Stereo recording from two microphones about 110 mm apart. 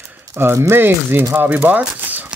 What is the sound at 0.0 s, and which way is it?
Speech, 20° right (ahead or behind).